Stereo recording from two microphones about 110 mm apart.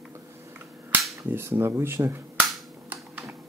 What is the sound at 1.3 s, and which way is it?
Speech, 25° right (ahead or behind).